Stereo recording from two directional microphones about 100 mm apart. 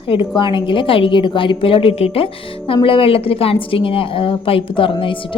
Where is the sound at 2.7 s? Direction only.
60° left (ahead or behind).